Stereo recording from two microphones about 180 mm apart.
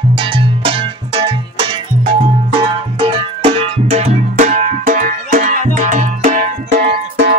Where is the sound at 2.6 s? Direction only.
30° right (ahead or behind).